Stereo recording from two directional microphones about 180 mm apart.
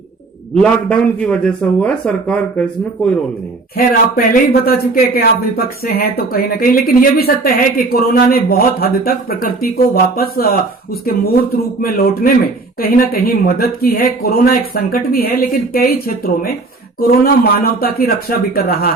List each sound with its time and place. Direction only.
0.5 s a man's voice: 5° left (ahead or behind)
3.8 s speech: 50° left (ahead or behind)
11.8 s speech: 55° left (ahead or behind)